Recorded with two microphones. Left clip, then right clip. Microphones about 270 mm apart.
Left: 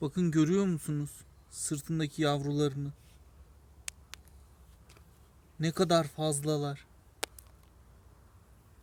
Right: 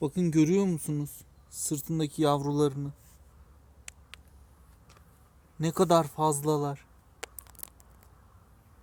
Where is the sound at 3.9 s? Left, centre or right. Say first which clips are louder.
Left 4 dB; left.